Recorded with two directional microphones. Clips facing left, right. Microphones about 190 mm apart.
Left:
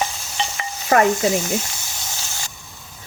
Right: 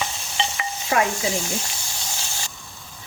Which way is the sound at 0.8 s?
55° left (ahead or behind).